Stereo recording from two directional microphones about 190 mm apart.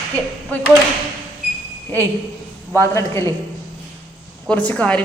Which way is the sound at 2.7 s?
15° left (ahead or behind).